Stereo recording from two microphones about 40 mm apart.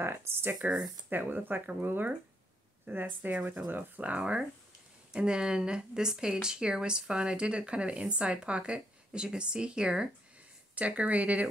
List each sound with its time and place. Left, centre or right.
0.0 s speech: right
0.6 s speech: right
1.1 s speech: right
4.2 s speech: right
10.7 s speech: right